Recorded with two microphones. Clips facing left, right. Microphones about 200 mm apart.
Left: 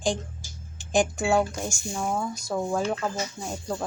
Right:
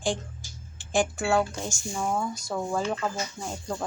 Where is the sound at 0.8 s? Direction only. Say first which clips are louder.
Left 2 dB; 15° left (ahead or behind).